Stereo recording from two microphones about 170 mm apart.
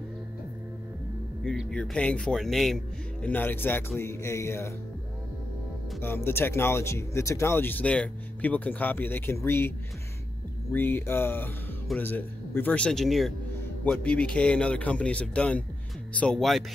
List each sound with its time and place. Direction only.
1.4 s speech: 5° left (ahead or behind)
5.9 s speech: 15° left (ahead or behind)